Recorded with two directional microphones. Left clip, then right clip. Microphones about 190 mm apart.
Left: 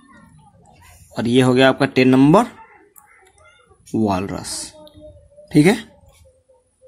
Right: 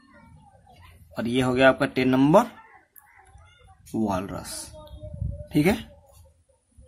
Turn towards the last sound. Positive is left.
turn(degrees=15)  # may be behind; listen again after turning